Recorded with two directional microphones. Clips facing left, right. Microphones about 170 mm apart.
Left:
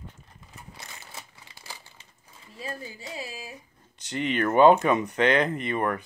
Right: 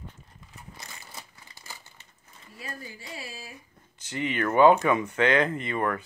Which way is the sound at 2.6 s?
20° left (ahead or behind).